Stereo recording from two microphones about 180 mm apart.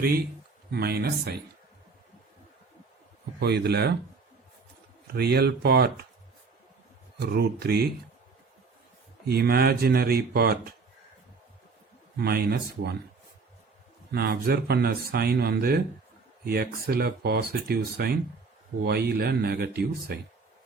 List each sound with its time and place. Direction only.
0.7 s speech: 60° right (ahead or behind)
3.4 s speech: 65° right (ahead or behind)
5.1 s speech: 60° right (ahead or behind)
7.2 s speech: 60° right (ahead or behind)
9.2 s speech: 60° right (ahead or behind)
12.1 s speech: 60° right (ahead or behind)
14.1 s speech: 60° right (ahead or behind)